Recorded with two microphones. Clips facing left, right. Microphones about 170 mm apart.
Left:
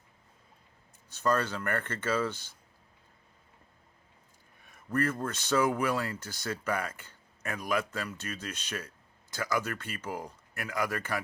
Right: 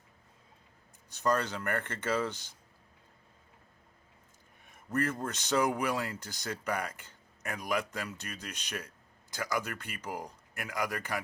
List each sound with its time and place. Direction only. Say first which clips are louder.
1.1 s speech: left 1 dB; 15° right (ahead or behind)
4.9 s speech: left 2 dB; 15° right (ahead or behind)